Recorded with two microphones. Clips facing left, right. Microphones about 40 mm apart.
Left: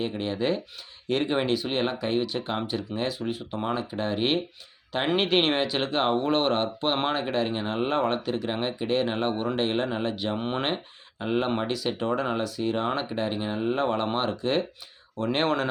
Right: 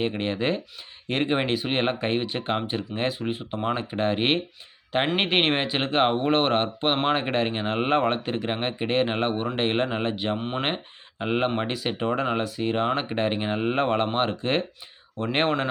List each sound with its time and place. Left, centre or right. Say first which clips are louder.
0.0 s speech: right 2 dB; right